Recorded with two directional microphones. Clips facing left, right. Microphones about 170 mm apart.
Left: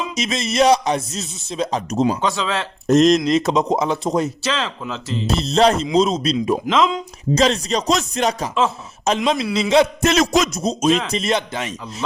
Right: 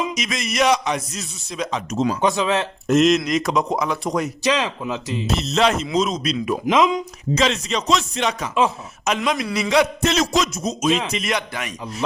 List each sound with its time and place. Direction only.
0.1 s a man's voice: 30° left (ahead or behind)
2.2 s speech: 20° right (ahead or behind)
2.8 s a man's voice: 40° left (ahead or behind)
4.4 s speech: 15° right (ahead or behind)
5.2 s speech: 30° left (ahead or behind)
6.7 s speech: 15° right (ahead or behind)
7.3 s a man's voice: 35° left (ahead or behind)
10.0 s a sound: 50° left (ahead or behind)
10.5 s a man's voice: 30° left (ahead or behind)